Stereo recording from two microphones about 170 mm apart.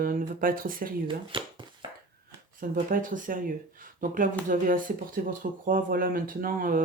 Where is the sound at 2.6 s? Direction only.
55° right (ahead or behind).